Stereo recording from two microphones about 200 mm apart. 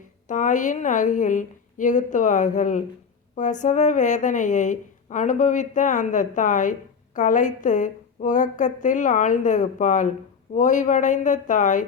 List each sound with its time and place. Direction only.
0.3 s a woman's voice: 40° left (ahead or behind)